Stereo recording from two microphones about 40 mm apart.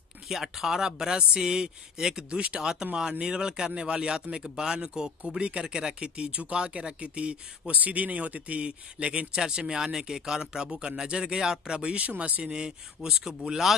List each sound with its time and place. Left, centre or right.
0.3 s speech: centre